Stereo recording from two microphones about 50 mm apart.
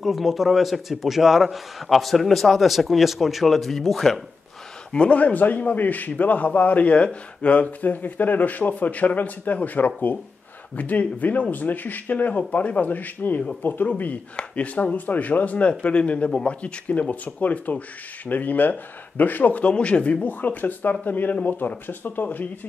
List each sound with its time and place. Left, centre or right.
0.0 s a man's voice: centre
4.9 s a man's voice: left
20.2 s a man's voice: left